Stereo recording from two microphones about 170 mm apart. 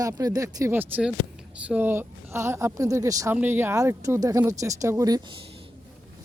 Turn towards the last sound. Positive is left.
turn(degrees=-20)  # may be behind; listen again after turning